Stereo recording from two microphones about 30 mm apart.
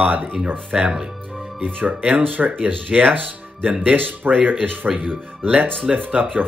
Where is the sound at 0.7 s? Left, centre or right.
Right.